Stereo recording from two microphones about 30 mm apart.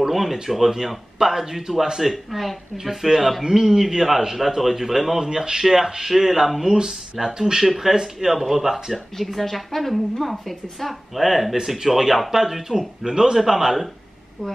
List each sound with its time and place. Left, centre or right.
0.1 s a man's voice: centre
3.6 s a man's voice: centre
7.6 s a man's voice: centre
7.9 s speech: centre
8.4 s a woman's voice: centre; by 13.4 s right
13.4 s a man's voice: centre